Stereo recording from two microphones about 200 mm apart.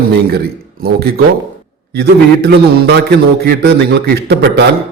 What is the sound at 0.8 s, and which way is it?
A man's voice, 50° right (ahead or behind).